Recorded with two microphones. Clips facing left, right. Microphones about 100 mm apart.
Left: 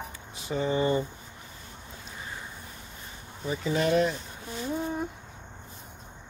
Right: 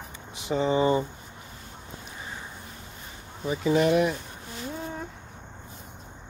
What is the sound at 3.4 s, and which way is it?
Speech, 15° right (ahead or behind).